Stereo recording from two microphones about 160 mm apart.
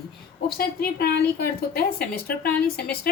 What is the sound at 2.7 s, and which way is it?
Speech, 75° left (ahead or behind).